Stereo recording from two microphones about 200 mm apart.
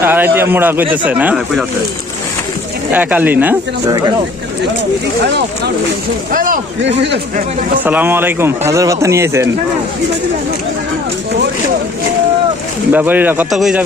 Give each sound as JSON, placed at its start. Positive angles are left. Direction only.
{"t": 0.0, "sound": "speech", "side_deg": -10}
{"t": 2.9, "sound": "speech", "side_deg": -10}
{"t": 6.3, "sound": "a sound", "side_deg": -45}
{"t": 7.9, "sound": "speech", "side_deg": -10}
{"t": 12.9, "sound": "speech", "side_deg": -10}